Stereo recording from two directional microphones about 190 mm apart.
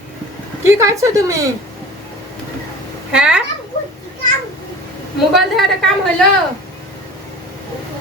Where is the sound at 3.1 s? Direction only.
5° right (ahead or behind).